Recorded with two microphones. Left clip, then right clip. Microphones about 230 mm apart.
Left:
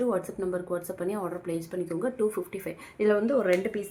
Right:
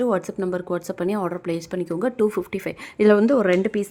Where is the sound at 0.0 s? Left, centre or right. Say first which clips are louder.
Right 6 dB; right.